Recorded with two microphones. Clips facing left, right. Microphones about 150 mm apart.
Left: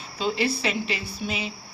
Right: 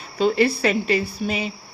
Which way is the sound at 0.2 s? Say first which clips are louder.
Right 7 dB; 50° right (ahead or behind).